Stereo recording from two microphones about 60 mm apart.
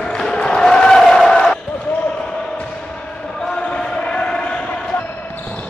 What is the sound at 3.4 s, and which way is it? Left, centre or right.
Basketball bounce, centre.